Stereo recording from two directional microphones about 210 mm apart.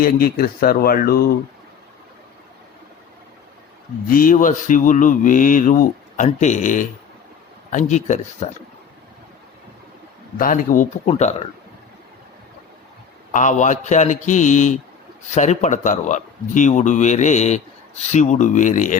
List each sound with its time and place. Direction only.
0.0 s speech: 45° left (ahead or behind)
4.1 s speech: 40° left (ahead or behind)
10.3 s speech: 40° left (ahead or behind)
13.3 s speech: 35° left (ahead or behind)